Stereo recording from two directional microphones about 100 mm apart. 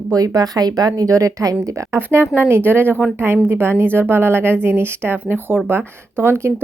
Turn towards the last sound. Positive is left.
turn(degrees=-25)  # may be behind; listen again after turning